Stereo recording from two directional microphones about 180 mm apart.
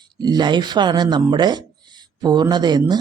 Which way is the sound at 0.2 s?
25° right (ahead or behind).